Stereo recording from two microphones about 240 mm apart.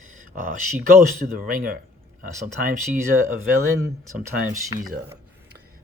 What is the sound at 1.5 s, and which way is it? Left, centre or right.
Speech, right.